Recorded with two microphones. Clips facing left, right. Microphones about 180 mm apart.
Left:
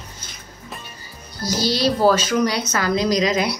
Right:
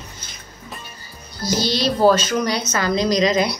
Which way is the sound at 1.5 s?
5° left (ahead or behind).